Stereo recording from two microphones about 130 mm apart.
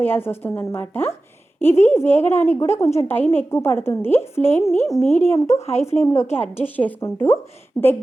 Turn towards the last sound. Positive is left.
turn(degrees=20)  # may be behind; listen again after turning